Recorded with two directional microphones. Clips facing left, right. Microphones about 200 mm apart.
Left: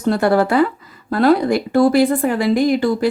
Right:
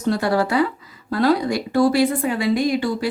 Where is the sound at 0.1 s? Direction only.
55° left (ahead or behind).